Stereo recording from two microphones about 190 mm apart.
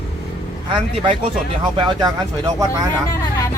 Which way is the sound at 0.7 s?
30° right (ahead or behind).